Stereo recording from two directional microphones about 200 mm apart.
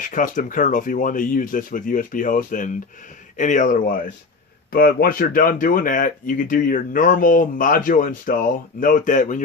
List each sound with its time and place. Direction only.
0.0 s speech: 40° left (ahead or behind)